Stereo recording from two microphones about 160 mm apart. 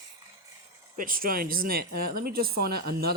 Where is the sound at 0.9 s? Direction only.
60° right (ahead or behind).